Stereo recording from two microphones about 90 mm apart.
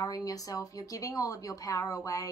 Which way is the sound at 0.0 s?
45° left (ahead or behind).